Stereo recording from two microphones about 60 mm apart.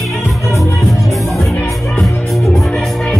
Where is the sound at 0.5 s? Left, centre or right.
Left.